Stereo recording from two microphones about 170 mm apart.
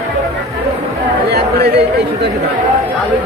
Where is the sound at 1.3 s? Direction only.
70° right (ahead or behind).